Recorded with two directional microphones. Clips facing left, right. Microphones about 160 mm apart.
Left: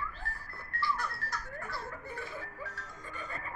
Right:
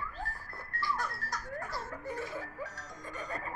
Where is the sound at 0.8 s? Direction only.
45° right (ahead or behind).